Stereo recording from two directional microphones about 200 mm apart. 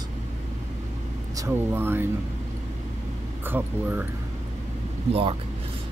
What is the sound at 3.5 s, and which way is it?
Speech, 10° right (ahead or behind).